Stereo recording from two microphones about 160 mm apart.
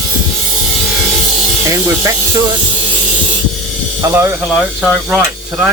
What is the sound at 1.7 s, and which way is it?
Speech, 15° right (ahead or behind).